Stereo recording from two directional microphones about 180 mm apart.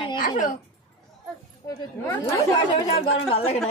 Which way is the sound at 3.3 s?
35° left (ahead or behind).